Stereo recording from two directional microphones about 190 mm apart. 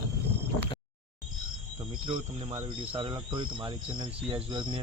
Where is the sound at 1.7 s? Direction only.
25° right (ahead or behind).